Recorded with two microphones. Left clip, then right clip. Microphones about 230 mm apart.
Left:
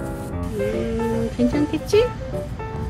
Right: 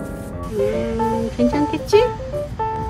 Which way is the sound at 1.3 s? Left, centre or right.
Centre.